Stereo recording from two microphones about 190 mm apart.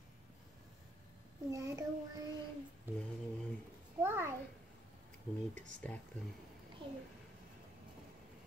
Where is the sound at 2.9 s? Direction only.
10° right (ahead or behind).